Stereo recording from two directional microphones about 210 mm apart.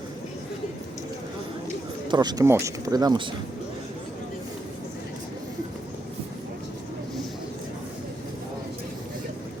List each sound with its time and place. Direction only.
2.0 s speech: 20° right (ahead or behind)